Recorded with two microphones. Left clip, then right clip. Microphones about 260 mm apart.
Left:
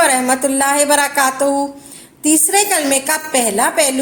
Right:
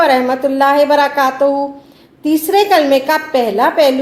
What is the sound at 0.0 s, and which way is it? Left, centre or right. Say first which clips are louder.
A woman's voice: right 2 dB; left.